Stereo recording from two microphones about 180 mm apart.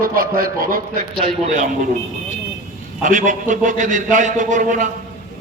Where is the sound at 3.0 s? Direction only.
45° right (ahead or behind).